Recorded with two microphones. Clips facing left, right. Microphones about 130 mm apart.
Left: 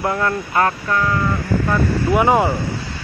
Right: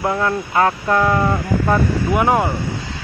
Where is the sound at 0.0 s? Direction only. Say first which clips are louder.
Right 1 dB; 10° right (ahead or behind).